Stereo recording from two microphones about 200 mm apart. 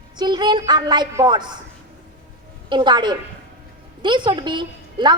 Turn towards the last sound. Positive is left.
turn(degrees=-20)  # may be behind; listen again after turning